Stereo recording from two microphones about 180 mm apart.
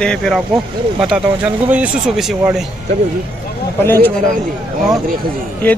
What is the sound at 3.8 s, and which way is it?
Speech, 10° left (ahead or behind).